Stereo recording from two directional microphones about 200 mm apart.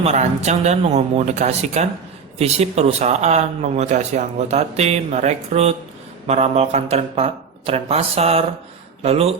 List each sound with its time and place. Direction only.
0.0 s speech: 35° right (ahead or behind)